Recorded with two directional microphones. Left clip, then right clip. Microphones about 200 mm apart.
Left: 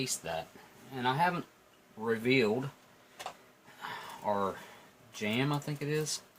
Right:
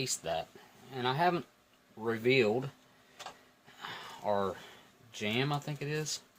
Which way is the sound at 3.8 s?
40° right (ahead or behind).